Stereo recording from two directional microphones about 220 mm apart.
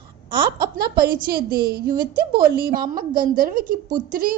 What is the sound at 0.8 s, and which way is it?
A woman's voice, 45° right (ahead or behind).